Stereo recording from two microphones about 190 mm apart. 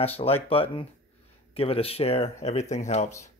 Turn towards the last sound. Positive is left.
turn(degrees=40)  # may be behind; listen again after turning